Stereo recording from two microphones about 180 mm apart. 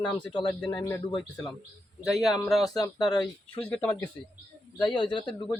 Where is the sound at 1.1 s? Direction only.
25° left (ahead or behind).